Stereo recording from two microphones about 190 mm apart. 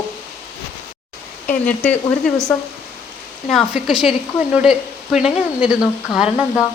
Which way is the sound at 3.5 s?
Centre (ahead or behind).